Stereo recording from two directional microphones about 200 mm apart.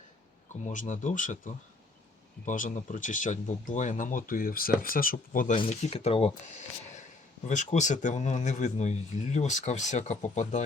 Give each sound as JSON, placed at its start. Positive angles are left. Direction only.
{"t": 0.6, "sound": "speech", "side_deg": 40}
{"t": 5.5, "sound": "speech", "side_deg": 30}